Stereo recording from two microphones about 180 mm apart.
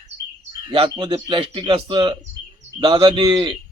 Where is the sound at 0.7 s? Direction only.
25° right (ahead or behind).